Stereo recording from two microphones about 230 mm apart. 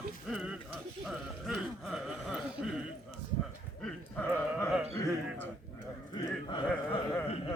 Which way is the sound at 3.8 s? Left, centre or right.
Centre.